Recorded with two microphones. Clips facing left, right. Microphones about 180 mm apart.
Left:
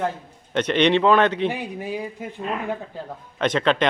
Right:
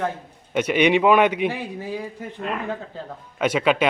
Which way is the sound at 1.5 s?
20° left (ahead or behind).